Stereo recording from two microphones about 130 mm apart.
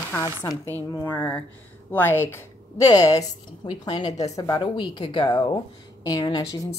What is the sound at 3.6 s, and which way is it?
A woman's voice, 40° left (ahead or behind).